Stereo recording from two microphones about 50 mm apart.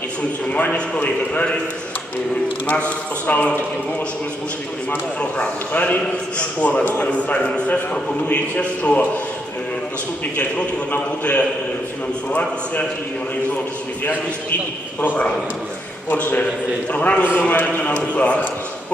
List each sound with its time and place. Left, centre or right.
0.5 s a man's voice: left
3.2 s a man's voice: left
5.2 s a man's voice: left
10.9 s a man's voice: left
16.1 s a man's voice: left